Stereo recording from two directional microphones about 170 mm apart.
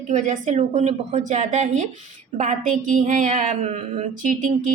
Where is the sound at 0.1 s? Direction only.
45° right (ahead or behind).